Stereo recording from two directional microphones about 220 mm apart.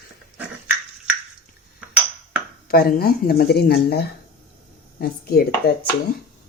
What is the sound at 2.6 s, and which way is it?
Speech, 45° left (ahead or behind).